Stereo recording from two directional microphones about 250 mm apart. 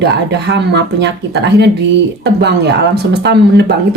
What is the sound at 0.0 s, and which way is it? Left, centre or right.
Speech, right.